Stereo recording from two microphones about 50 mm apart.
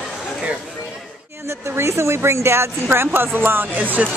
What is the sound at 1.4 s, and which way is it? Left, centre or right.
Speech, right.